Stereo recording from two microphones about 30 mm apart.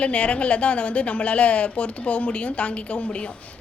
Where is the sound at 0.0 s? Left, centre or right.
Left.